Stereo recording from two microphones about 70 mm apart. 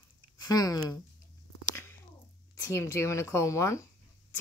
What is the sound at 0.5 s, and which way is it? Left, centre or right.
Speech, left.